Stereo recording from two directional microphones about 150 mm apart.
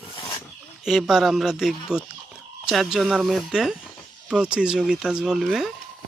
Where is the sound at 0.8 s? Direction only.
Centre (ahead or behind).